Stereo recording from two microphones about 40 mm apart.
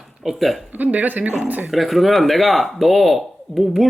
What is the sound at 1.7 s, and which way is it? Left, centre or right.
Speech, centre.